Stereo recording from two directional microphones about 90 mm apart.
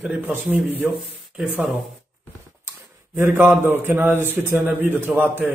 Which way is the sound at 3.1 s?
25° right (ahead or behind).